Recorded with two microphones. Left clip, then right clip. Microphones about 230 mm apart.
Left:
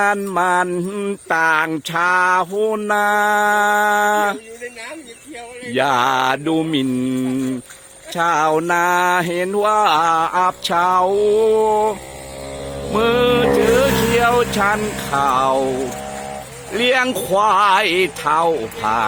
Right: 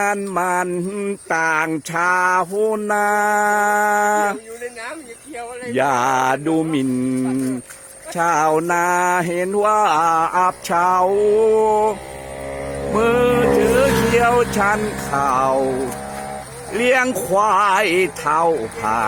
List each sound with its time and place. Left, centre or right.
0.0 s mantra: centre
5.7 s mantra: centre
8.1 s mantra: centre
12.9 s music: centre
13.8 s speech: left
14.2 s mantra: centre
14.5 s speech: centre
14.9 s mantra: centre
16.7 s mantra: centre